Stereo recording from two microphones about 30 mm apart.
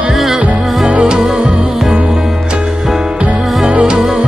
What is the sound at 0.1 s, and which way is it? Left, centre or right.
Music, centre.